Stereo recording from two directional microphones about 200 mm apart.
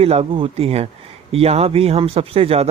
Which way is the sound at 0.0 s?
30° right (ahead or behind).